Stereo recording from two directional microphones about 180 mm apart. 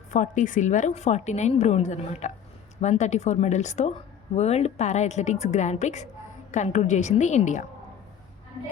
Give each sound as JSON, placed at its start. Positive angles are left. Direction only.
{"t": 0.1, "sound": "a woman's voice", "side_deg": 45}